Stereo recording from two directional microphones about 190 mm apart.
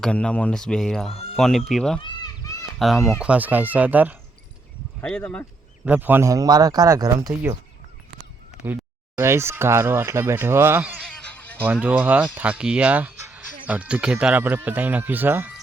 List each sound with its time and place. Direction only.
0.0 s speech: 5° left (ahead or behind)
4.9 s speech: 5° left (ahead or behind)
5.8 s speech: 10° right (ahead or behind)
8.6 s speech: 10° right (ahead or behind)